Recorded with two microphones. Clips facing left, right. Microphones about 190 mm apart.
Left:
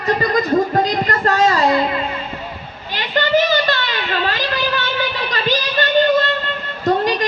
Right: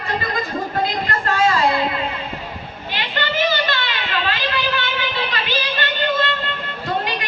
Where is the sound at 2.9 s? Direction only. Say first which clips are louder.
Left 8 dB; 40° left (ahead or behind).